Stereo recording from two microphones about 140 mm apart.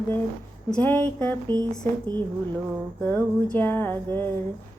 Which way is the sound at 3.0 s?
10° left (ahead or behind).